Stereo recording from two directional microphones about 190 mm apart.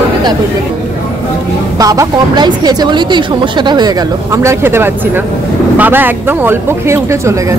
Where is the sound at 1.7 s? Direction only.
20° right (ahead or behind).